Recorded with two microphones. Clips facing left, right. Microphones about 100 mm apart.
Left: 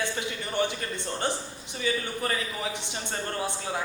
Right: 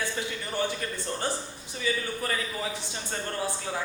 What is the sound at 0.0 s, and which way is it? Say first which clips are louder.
Speech: left 1 dB; 20° left (ahead or behind).